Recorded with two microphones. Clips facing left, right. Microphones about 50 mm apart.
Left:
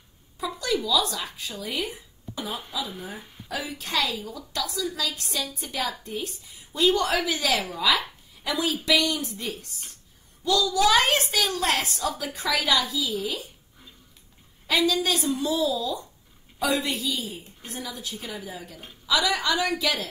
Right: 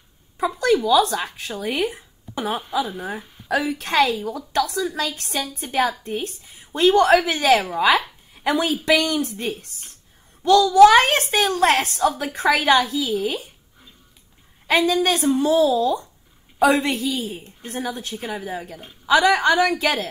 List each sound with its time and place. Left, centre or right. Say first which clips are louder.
0.6 s a woman's voice: right 8 dB; right
3.4 s a woman's voice: right 10 dB; right
14.7 s a woman's voice: right 5 dB; right